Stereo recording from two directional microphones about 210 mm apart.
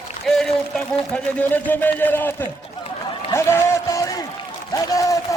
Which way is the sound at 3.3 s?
15° left (ahead or behind).